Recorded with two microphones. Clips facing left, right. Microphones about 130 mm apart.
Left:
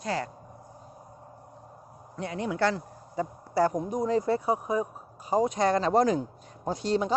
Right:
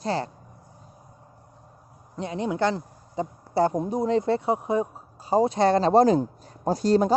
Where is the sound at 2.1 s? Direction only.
20° right (ahead or behind); by 7.2 s 40° right (ahead or behind).